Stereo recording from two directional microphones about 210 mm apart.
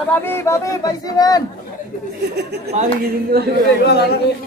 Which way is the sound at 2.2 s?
50° right (ahead or behind).